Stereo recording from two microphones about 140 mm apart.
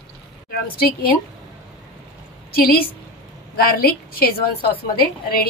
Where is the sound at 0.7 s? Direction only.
90° left.